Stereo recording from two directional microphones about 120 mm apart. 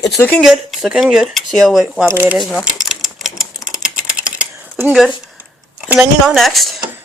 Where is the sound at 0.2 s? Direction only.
15° left (ahead or behind).